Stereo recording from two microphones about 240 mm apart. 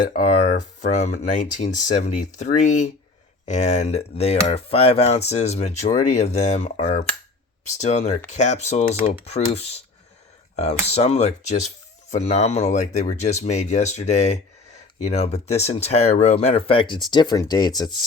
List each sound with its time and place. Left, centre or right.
0.1 s speech: left